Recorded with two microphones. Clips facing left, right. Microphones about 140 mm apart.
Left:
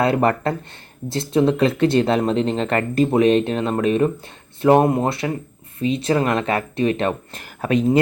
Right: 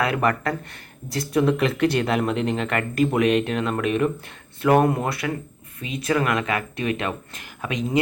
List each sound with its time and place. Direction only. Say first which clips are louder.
0.0 s speech: left 4 dB; 30° left (ahead or behind)